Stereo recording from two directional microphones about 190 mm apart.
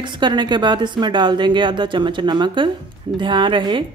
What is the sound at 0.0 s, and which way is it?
A woman's voice, 25° right (ahead or behind).